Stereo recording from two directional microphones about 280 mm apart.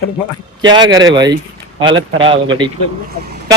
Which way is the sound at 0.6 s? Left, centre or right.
Centre.